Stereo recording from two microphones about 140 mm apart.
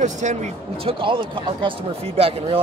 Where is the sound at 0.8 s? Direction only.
40° right (ahead or behind).